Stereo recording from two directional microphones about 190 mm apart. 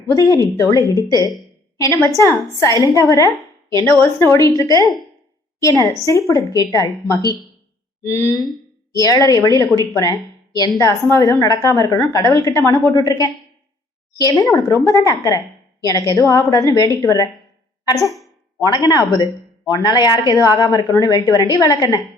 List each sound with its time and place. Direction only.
0.1 s a woman's voice: 15° left (ahead or behind)
1.8 s a woman's voice: 15° left (ahead or behind)